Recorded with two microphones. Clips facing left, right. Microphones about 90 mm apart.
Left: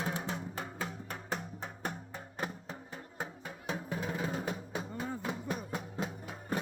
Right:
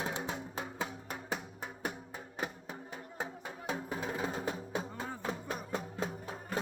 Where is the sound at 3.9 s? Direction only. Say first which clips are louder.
Left 2 dB; 25° right (ahead or behind).